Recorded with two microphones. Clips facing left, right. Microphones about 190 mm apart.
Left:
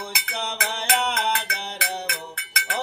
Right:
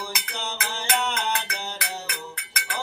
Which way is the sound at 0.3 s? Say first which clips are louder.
Left 3 dB; 60° left (ahead or behind).